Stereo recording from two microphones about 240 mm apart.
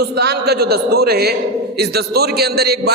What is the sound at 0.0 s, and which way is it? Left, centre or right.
A man's voice, right.